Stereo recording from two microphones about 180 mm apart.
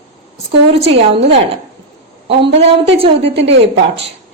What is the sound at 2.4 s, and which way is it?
Speech, 30° right (ahead or behind).